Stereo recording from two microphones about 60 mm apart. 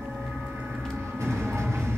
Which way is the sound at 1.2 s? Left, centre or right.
Right.